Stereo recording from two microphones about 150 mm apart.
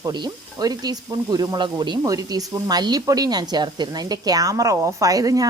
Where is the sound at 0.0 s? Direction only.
25° right (ahead or behind).